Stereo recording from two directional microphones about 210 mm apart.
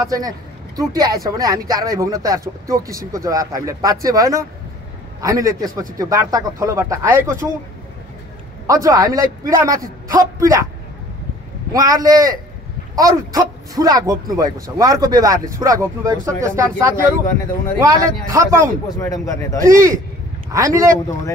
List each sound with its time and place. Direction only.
0.7 s speech: 20° right (ahead or behind)
8.6 s speech: 15° right (ahead or behind)
11.7 s speech: 15° right (ahead or behind)
18.9 s speech: 15° left (ahead or behind)
19.7 s speech: 15° right (ahead or behind)